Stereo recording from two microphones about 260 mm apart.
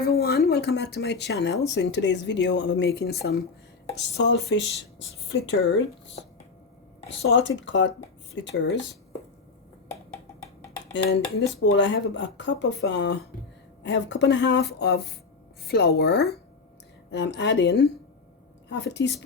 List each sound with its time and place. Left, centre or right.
0.0 s a woman's voice: left
7.1 s speech: left
10.9 s a woman's voice: left